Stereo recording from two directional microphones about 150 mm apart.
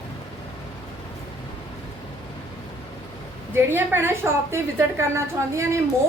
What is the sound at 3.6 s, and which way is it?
A woman's voice, 15° right (ahead or behind).